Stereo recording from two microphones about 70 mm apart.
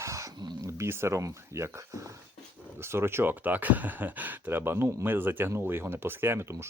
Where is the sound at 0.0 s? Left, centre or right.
Right.